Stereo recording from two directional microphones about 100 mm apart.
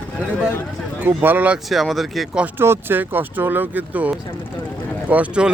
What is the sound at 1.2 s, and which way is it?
Speech, 15° right (ahead or behind).